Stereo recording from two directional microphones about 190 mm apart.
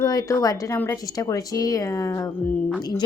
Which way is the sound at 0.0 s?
15° left (ahead or behind).